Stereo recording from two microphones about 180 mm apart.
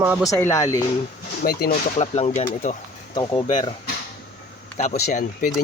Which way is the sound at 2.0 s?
35° left (ahead or behind).